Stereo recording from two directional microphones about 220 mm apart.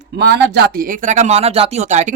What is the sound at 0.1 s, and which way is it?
Speech, 50° right (ahead or behind).